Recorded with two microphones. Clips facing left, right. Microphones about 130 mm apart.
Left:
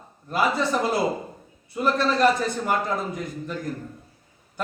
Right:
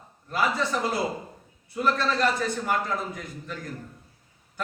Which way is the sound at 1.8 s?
15° left (ahead or behind).